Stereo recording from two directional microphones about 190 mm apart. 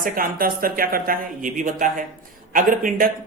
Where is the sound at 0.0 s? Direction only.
50° right (ahead or behind).